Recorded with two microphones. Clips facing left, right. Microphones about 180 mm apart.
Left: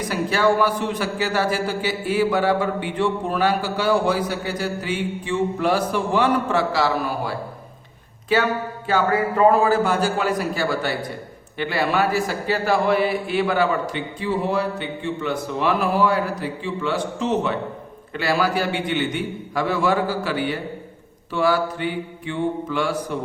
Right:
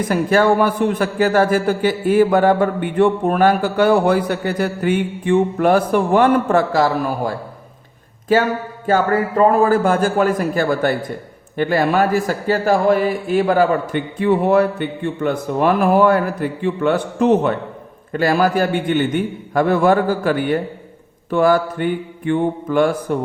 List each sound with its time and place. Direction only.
0.0 s a man's voice: 50° right (ahead or behind)
8.9 s a man's voice: 45° right (ahead or behind)